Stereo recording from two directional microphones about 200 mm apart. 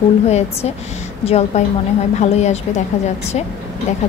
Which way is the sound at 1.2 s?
30° left (ahead or behind).